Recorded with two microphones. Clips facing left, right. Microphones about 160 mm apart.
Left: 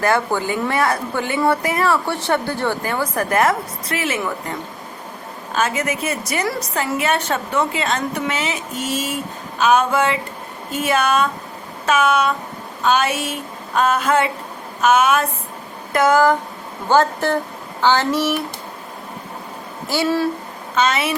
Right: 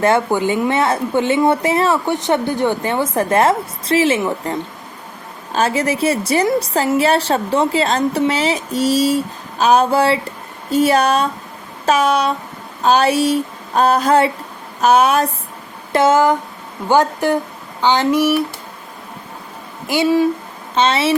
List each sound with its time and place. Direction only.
0.0 s a woman's voice: 20° right (ahead or behind)
19.9 s speech: 15° right (ahead or behind)
20.7 s a woman's voice: 30° right (ahead or behind)